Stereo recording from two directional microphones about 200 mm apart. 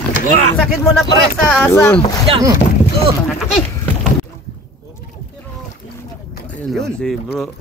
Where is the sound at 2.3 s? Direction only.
15° right (ahead or behind).